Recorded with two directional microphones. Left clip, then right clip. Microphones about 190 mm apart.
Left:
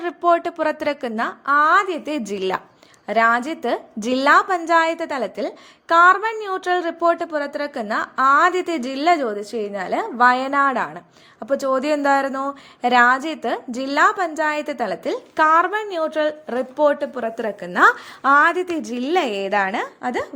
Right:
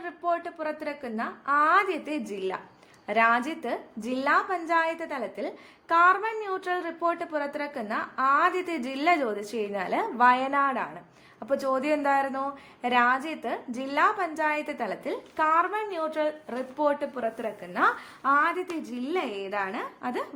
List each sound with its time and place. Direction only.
0.0 s a woman's voice: 35° left (ahead or behind)
3.1 s a woman's voice: 25° left (ahead or behind)